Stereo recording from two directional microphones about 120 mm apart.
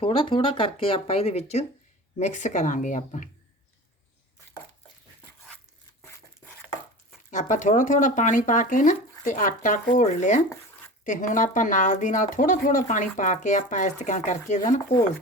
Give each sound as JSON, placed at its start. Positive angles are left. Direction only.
{"t": 0.0, "sound": "speech", "side_deg": 50}
{"t": 2.1, "sound": "speech", "side_deg": 85}
{"t": 7.3, "sound": "speech", "side_deg": 90}